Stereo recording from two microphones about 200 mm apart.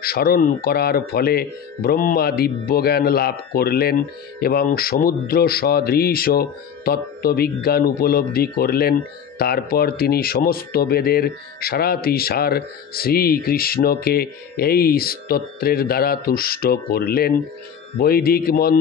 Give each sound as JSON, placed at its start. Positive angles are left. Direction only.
{"t": 0.0, "sound": "speech", "side_deg": 50}